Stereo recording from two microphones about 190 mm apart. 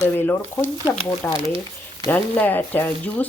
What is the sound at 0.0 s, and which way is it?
Speech, 10° left (ahead or behind).